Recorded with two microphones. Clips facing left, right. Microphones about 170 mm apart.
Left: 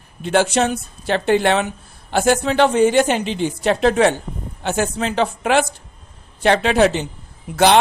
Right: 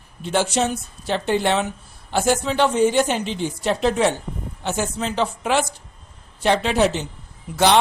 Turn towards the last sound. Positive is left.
turn(degrees=55)  # may be behind; listen again after turning